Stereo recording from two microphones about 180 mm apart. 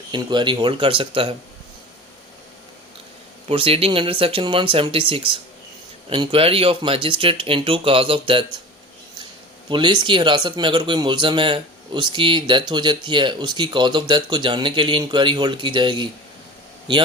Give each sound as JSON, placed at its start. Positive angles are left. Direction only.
{"t": 0.1, "sound": "a man's voice", "side_deg": -25}
{"t": 3.5, "sound": "a man's voice", "side_deg": -30}
{"t": 9.6, "sound": "a man's voice", "side_deg": -25}